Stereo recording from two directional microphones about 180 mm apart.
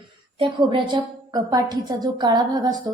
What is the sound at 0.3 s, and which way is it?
A woman's voice, 25° right (ahead or behind).